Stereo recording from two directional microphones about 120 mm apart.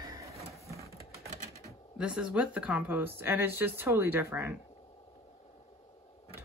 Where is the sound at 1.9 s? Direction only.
5° right (ahead or behind).